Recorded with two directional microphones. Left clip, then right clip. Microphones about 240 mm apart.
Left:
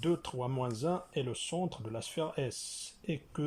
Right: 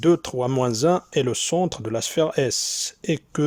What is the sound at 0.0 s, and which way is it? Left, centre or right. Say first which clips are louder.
Speech: right 14 dB; right.